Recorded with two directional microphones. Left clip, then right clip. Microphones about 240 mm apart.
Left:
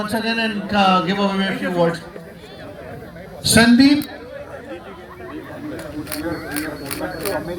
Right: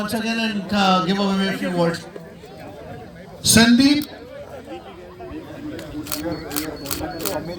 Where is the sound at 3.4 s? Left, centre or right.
Right.